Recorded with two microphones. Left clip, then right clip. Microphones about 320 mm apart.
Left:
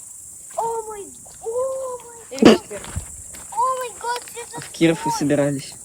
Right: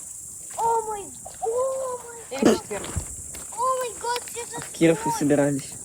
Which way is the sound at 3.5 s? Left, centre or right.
Centre.